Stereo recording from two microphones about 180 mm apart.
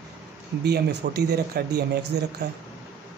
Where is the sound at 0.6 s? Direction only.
70° right (ahead or behind).